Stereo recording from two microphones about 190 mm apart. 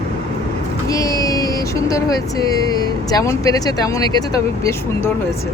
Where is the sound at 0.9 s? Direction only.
20° left (ahead or behind).